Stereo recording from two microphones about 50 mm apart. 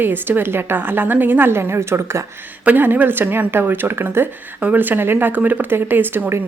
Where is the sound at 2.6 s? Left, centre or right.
Right.